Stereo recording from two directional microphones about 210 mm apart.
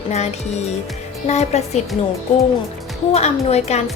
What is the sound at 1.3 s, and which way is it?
Speech, 30° left (ahead or behind).